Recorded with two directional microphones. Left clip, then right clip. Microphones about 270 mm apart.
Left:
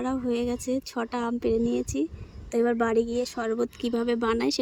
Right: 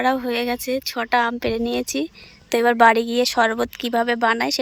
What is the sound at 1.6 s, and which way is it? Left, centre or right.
Speech, right.